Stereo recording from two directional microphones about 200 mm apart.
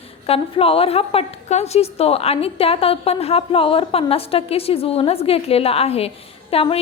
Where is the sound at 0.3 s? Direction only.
30° left (ahead or behind).